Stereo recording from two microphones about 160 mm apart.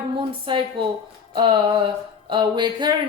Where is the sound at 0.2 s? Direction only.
30° right (ahead or behind).